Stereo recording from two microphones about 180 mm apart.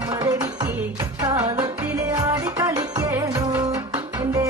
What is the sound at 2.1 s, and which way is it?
Music, 20° right (ahead or behind).